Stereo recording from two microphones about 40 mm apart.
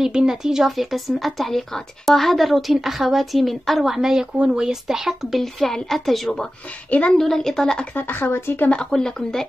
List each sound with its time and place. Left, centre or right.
0.0 s speech: centre
0.7 s speech: centre
5.4 s speech: centre
6.9 s a woman's voice: left
7.2 s speech: centre
7.9 s speech: left
8.3 s speech: left
8.9 s speech: centre